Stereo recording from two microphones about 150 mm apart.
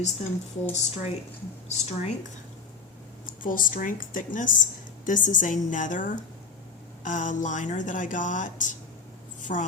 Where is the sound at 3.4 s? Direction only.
65° left (ahead or behind).